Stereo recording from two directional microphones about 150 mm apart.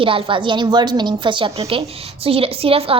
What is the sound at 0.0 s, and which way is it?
A woman's voice, 35° right (ahead or behind).